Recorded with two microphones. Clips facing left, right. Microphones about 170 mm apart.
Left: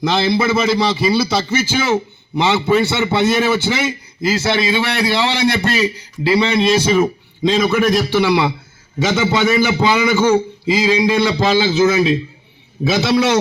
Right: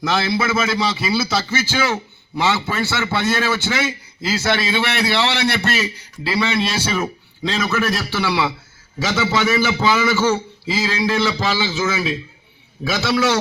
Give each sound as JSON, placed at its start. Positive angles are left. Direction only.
{"t": 0.0, "sound": "a man's voice", "side_deg": 20}
{"t": 0.5, "sound": "a man's voice", "side_deg": 0}
{"t": 1.5, "sound": "a man's voice", "side_deg": 15}